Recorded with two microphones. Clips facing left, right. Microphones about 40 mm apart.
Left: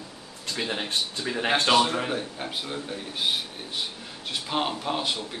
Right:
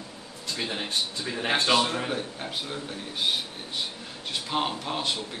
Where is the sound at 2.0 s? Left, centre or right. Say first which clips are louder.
Left 2 dB; centre.